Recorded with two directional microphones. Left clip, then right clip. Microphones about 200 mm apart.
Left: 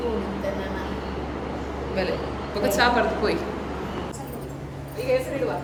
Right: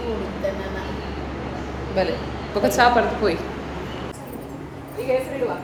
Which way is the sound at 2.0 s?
15° right (ahead or behind).